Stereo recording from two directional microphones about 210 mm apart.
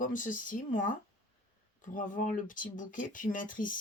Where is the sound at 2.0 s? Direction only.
40° left (ahead or behind).